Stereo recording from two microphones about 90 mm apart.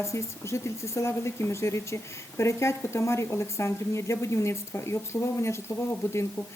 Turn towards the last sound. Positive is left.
turn(degrees=30)  # may be behind; listen again after turning